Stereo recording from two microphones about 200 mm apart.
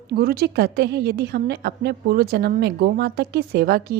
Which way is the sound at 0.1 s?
50° right (ahead or behind).